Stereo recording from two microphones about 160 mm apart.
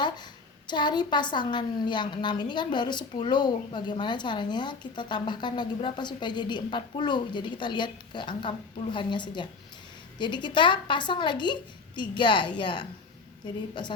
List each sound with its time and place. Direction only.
0.7 s a woman's voice: 30° left (ahead or behind)